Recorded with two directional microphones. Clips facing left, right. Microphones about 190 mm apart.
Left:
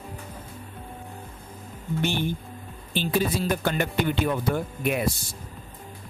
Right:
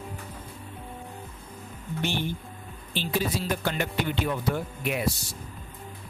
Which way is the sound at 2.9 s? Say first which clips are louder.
Left 3 dB; 50° left (ahead or behind).